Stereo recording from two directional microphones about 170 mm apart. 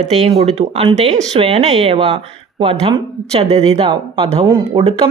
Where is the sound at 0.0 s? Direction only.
40° right (ahead or behind).